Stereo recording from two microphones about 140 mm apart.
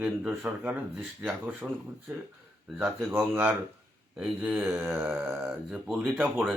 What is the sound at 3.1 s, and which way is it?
Speech, 15° right (ahead or behind).